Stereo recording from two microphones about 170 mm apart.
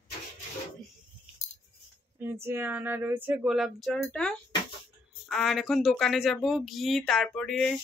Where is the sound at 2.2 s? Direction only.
15° right (ahead or behind).